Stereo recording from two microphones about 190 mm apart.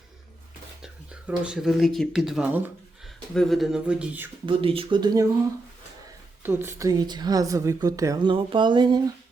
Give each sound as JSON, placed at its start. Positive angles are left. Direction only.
{"t": 0.8, "sound": "speech", "side_deg": -5}
{"t": 4.4, "sound": "a woman's voice", "side_deg": -25}
{"t": 6.4, "sound": "a woman's voice", "side_deg": -10}